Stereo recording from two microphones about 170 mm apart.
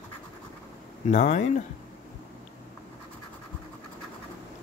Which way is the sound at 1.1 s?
45° left (ahead or behind).